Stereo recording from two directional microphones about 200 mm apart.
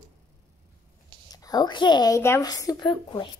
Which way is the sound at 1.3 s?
20° left (ahead or behind).